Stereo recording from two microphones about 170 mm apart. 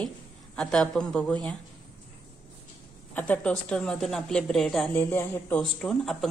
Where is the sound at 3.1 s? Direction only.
10° left (ahead or behind).